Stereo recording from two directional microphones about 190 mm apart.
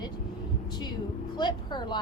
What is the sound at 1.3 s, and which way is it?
Speech, 25° left (ahead or behind).